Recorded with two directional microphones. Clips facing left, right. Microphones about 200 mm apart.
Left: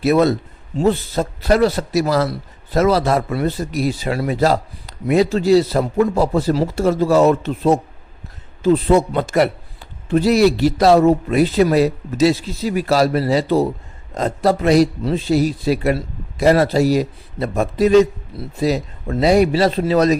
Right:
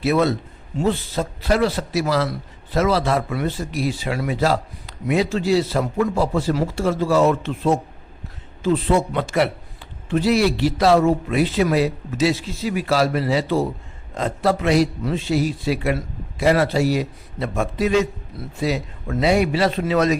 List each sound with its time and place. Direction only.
0.0 s a man's voice: 40° left (ahead or behind)